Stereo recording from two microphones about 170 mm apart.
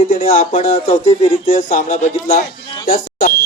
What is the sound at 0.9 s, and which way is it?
Speech, 45° left (ahead or behind).